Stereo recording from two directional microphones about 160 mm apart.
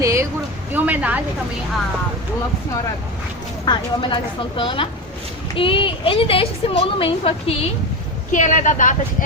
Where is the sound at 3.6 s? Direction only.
30° left (ahead or behind).